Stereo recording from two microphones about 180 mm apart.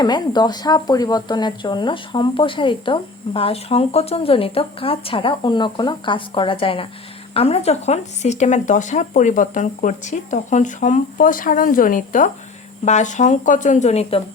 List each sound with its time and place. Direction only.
0.0 s speech: 25° left (ahead or behind)